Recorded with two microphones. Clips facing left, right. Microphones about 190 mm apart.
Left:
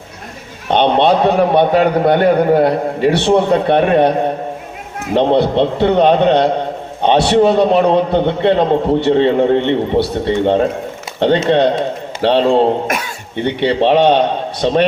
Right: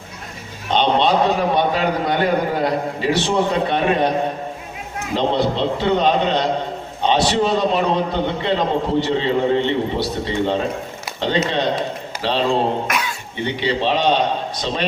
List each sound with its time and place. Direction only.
0.7 s a man's voice: 60° left (ahead or behind)